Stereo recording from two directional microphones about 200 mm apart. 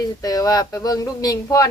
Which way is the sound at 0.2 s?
20° left (ahead or behind).